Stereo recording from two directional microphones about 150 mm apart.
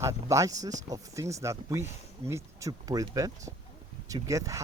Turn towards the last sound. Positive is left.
turn(degrees=-20)  # may be behind; listen again after turning